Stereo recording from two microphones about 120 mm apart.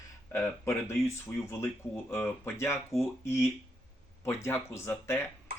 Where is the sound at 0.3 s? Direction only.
20° left (ahead or behind).